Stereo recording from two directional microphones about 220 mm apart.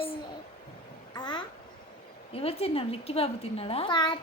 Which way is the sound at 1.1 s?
20° left (ahead or behind).